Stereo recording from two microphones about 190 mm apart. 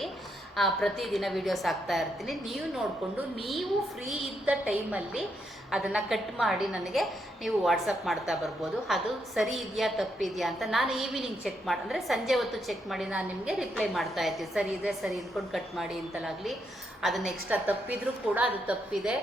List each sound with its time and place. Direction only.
0.5 s a woman's voice: centre (ahead or behind)